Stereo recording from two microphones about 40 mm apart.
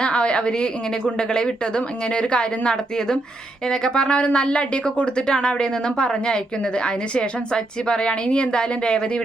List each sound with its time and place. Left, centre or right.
0.0 s speech: left